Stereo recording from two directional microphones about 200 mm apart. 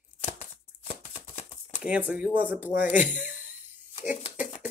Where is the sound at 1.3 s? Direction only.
35° left (ahead or behind).